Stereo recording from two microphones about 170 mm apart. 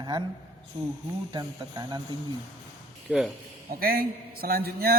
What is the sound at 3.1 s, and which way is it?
Speech, 5° right (ahead or behind).